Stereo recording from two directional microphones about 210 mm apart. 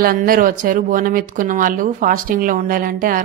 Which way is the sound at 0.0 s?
45° right (ahead or behind).